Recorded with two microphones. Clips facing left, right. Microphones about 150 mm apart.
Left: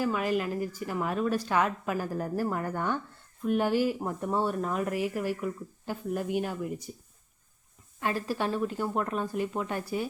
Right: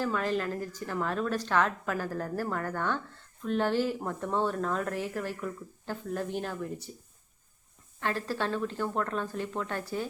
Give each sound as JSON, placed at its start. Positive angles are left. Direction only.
{"t": 0.0, "sound": "a woman's voice", "side_deg": 10}
{"t": 8.0, "sound": "a woman's voice", "side_deg": 15}